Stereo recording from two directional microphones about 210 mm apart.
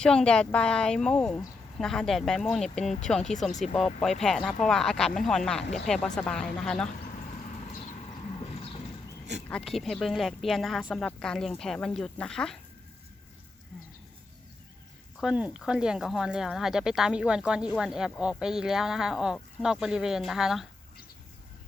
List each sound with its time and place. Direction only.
0.0 s speech: 5° left (ahead or behind)
7.7 s a sound: 30° left (ahead or behind)
9.5 s speech: 5° left (ahead or behind)
15.2 s speech: 5° right (ahead or behind)